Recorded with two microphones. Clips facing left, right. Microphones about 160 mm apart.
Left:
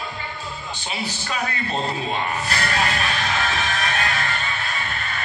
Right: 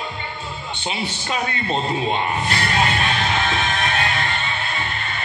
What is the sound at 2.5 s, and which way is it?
Music, 25° right (ahead or behind).